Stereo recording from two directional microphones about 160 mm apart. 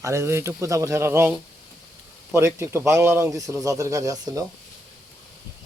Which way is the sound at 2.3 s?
15° right (ahead or behind).